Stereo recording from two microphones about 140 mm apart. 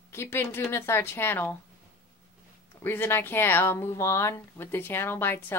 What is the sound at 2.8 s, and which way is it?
Speech, 15° left (ahead or behind).